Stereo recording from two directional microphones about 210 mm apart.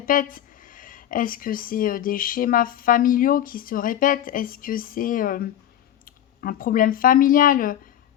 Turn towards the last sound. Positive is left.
turn(degrees=40)  # may be behind; listen again after turning